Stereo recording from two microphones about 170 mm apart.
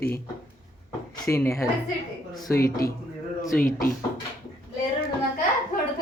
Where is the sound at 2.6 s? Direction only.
60° left (ahead or behind).